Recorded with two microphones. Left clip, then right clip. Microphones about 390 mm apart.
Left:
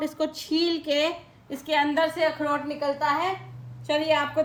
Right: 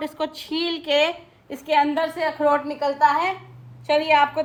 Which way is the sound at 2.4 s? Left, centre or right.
Centre.